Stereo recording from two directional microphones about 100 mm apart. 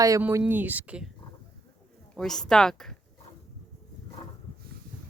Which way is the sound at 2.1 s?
5° left (ahead or behind).